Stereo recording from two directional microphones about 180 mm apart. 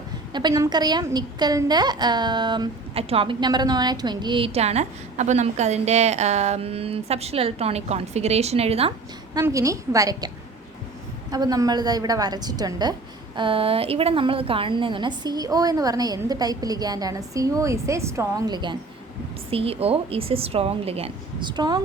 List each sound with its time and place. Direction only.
0.3 s a woman's voice: 20° right (ahead or behind)
9.3 s a woman's voice: 15° right (ahead or behind)